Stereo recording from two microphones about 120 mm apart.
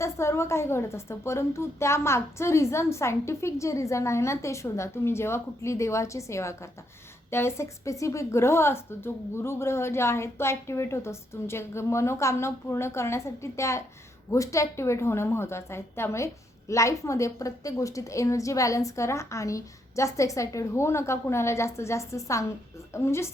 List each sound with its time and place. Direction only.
0.0 s a woman's voice: 20° left (ahead or behind)